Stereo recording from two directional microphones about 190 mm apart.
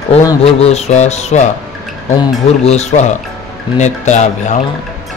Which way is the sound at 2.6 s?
35° left (ahead or behind).